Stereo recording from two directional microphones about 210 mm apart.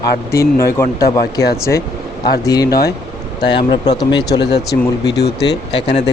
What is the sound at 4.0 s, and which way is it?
Speech, 20° left (ahead or behind).